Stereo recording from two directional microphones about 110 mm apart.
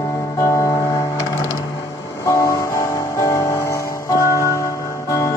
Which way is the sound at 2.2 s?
30° left (ahead or behind).